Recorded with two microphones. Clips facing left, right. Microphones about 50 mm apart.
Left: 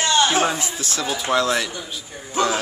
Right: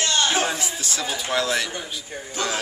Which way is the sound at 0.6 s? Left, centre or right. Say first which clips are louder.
Left 2 dB; centre.